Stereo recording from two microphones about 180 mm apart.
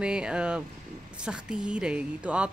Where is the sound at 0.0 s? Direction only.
5° right (ahead or behind).